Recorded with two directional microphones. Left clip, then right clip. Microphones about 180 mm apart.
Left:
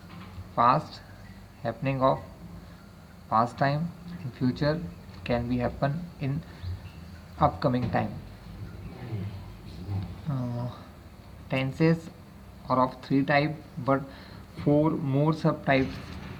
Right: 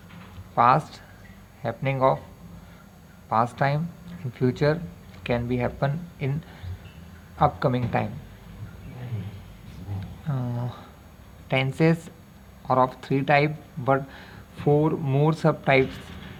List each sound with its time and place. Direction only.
0.5 s speech: 45° right (ahead or behind)
3.2 s speech: 40° right (ahead or behind)
7.3 s speech: 40° right (ahead or behind)
10.2 s a sound: 40° right (ahead or behind)
11.4 s speech: 50° right (ahead or behind)